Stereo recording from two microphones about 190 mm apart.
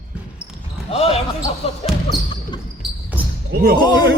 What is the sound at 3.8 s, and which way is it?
Speech, 20° left (ahead or behind).